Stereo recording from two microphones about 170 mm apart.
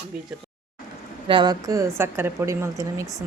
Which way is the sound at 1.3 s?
25° right (ahead or behind).